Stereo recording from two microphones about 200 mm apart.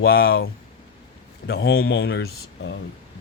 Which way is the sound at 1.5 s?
50° left (ahead or behind).